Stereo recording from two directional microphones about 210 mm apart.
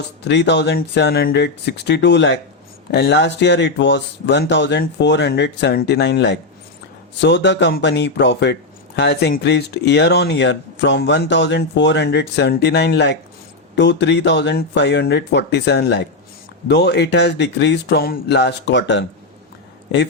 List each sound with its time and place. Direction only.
0.3 s speech: 55° left (ahead or behind)